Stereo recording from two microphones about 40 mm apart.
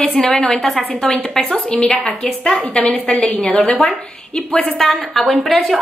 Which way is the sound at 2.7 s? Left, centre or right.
Left.